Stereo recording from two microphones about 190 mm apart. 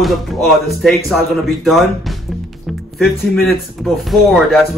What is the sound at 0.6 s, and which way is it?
Speech, centre (ahead or behind).